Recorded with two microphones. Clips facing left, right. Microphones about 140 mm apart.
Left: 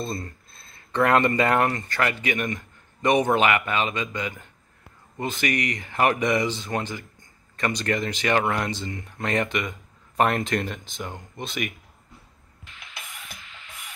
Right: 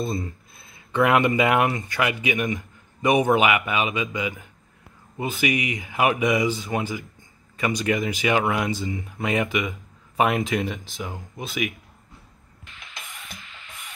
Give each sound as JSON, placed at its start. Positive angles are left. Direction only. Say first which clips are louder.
{"t": 0.0, "sound": "a man's voice", "louder": "right 3 dB", "side_deg": -10}
{"t": 12.9, "sound": "music", "louder": "right 1 dB", "side_deg": 0}